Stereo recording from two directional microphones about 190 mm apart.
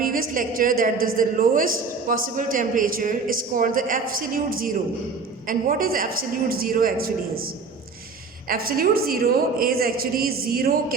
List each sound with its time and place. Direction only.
0.0 s a woman's voice: 45° right (ahead or behind)